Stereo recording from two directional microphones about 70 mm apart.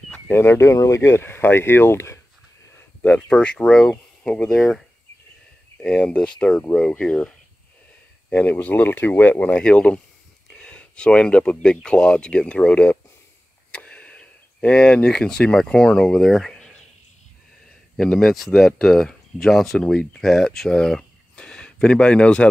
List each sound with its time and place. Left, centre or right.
0.3 s speech: left
3.3 s speech: centre
8.4 s speech: left; by 16.5 s centre
17.9 s speech: centre